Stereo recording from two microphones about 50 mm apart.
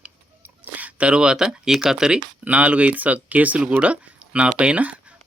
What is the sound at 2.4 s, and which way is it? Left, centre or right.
Speech, right.